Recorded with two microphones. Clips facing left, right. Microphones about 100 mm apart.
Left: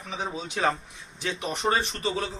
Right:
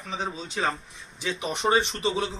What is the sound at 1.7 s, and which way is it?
Speech, 25° right (ahead or behind).